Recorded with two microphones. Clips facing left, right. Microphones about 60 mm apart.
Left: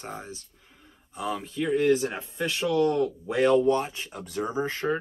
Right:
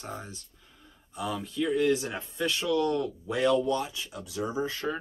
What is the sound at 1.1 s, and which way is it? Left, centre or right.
Speech, left.